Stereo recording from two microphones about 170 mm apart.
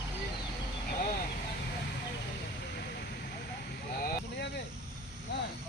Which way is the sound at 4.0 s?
90° left.